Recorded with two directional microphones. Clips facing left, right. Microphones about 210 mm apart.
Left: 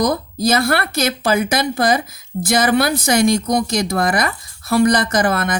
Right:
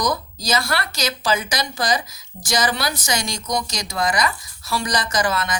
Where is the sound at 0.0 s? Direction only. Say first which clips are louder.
Left 7 dB; 55° left (ahead or behind).